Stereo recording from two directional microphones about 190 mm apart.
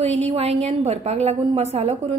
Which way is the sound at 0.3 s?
35° right (ahead or behind).